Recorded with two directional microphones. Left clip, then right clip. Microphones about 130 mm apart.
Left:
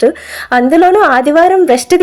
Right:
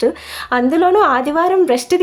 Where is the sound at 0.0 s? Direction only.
30° left (ahead or behind).